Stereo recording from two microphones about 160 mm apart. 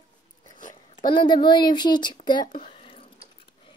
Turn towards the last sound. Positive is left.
turn(degrees=35)  # may be behind; listen again after turning